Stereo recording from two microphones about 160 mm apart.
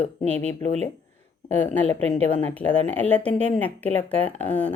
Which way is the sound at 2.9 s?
10° left (ahead or behind).